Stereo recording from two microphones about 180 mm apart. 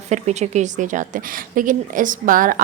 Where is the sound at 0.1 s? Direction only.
40° right (ahead or behind).